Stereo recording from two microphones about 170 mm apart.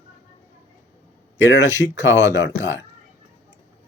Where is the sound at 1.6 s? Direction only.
15° right (ahead or behind).